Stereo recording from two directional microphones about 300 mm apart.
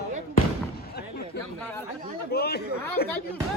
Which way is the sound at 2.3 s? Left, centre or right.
Left.